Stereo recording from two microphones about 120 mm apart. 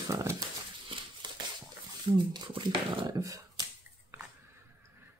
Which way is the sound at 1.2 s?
40° right (ahead or behind).